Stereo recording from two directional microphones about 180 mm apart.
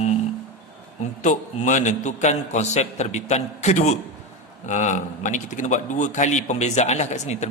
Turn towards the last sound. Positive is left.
turn(degrees=40)  # may be behind; listen again after turning